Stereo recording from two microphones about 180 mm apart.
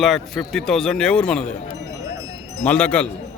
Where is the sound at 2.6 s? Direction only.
5° left (ahead or behind).